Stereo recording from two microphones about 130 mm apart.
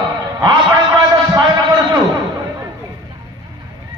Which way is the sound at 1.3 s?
35° right (ahead or behind).